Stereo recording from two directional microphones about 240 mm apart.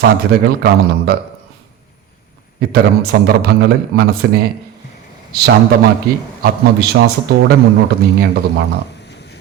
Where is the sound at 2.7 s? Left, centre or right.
Right.